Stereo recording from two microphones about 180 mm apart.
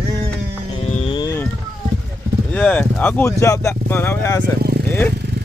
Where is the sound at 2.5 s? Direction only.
10° left (ahead or behind).